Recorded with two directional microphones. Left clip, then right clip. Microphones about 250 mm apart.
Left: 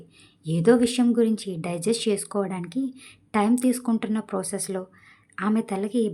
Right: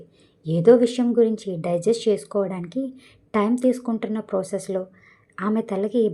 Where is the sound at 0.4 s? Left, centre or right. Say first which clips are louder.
Right 5 dB; left.